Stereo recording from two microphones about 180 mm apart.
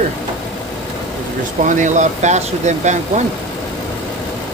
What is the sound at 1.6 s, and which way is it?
Speech, 45° right (ahead or behind).